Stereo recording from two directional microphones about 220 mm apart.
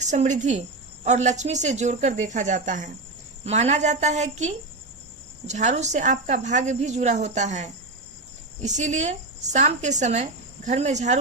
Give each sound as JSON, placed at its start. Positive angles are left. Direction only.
{"t": 0.0, "sound": "speech", "side_deg": -30}